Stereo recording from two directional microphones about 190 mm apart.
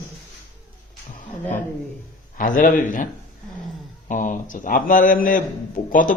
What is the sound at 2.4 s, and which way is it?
Speech, 45° left (ahead or behind).